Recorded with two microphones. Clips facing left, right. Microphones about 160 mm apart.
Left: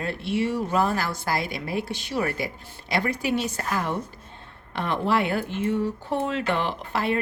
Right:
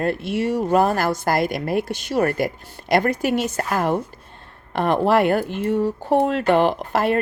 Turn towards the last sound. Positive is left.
turn(degrees=-45)  # may be behind; listen again after turning